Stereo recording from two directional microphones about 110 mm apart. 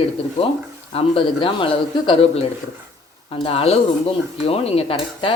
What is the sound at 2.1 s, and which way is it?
Speech, 65° left (ahead or behind).